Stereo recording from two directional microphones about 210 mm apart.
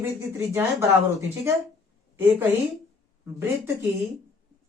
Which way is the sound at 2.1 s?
10° right (ahead or behind).